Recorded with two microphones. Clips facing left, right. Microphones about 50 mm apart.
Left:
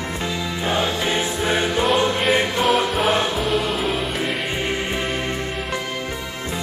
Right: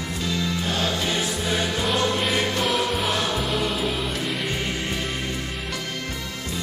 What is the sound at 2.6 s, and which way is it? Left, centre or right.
Music, centre.